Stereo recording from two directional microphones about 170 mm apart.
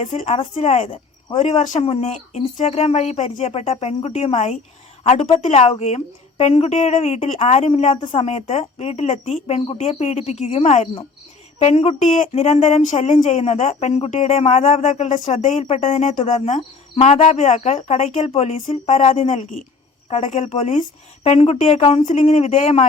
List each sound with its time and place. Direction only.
0.0 s speech: 45° left (ahead or behind)